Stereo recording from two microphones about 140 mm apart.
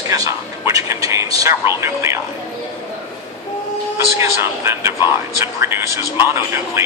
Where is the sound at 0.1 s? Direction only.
25° right (ahead or behind).